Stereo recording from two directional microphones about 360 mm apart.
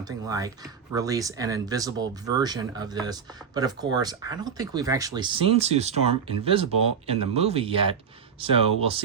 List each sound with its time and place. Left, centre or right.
0.3 s speech: centre